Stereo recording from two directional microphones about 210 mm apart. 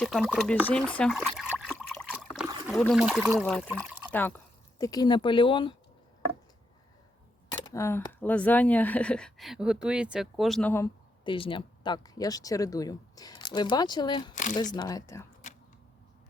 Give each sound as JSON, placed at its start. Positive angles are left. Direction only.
{"t": 0.0, "sound": "speech", "side_deg": 0}
{"t": 2.1, "sound": "trickle", "side_deg": -5}
{"t": 2.8, "sound": "speech", "side_deg": 0}
{"t": 3.7, "sound": "speech", "side_deg": -10}
{"t": 4.1, "sound": "speech", "side_deg": 10}
{"t": 7.5, "sound": "speech", "side_deg": 15}
{"t": 11.2, "sound": "speech", "side_deg": 25}
{"t": 14.3, "sound": "speech", "side_deg": 35}
{"t": 14.6, "sound": "speech", "side_deg": 20}